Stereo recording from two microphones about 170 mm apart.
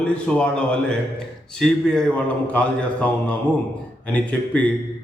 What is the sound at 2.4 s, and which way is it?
Mantra, 10° left (ahead or behind).